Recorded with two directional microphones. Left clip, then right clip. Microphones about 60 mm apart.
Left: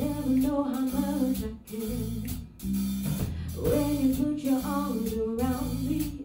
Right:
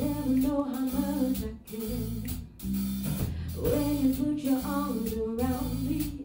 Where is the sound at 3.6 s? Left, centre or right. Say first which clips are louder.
Left 1 dB; left.